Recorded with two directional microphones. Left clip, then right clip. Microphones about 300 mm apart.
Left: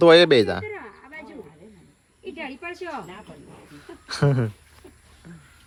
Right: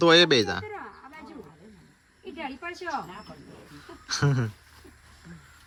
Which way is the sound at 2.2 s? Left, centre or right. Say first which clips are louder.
Left 2 dB; centre.